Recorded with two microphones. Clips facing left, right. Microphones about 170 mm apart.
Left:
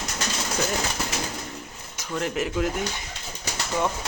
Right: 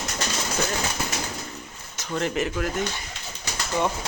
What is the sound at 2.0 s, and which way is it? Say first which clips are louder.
Speech: right 1 dB; 5° left (ahead or behind).